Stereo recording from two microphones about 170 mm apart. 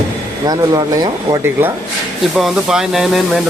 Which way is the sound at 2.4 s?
Centre (ahead or behind).